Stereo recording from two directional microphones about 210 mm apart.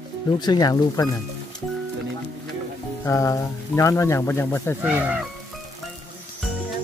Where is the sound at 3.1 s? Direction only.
15° left (ahead or behind).